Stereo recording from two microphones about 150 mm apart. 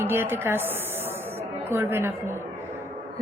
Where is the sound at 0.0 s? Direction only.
15° right (ahead or behind).